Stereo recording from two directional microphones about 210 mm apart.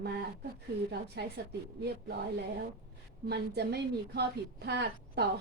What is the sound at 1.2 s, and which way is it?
Speech, 50° right (ahead or behind).